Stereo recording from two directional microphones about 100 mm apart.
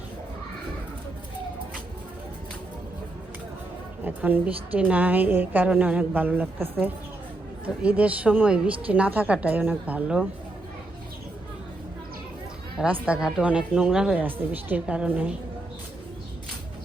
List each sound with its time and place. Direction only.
4.0 s a woman's voice: 15° right (ahead or behind)
12.8 s a woman's voice: 10° right (ahead or behind)
14.3 s a woman's voice: 20° right (ahead or behind)